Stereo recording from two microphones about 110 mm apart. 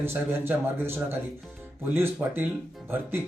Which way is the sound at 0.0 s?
20° right (ahead or behind).